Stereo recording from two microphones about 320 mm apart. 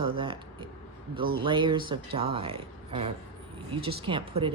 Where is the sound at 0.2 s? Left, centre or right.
Centre.